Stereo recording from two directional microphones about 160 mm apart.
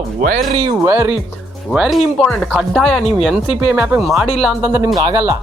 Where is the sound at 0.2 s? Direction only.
60° right (ahead or behind).